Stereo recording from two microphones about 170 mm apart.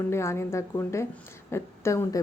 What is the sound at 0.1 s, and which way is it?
A woman's voice, 15° left (ahead or behind).